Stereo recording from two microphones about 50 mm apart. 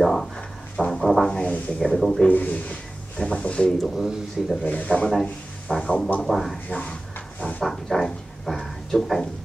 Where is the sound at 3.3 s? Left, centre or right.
Left.